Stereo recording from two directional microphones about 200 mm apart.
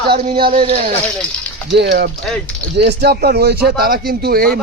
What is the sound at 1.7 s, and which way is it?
A man's voice, 60° right (ahead or behind).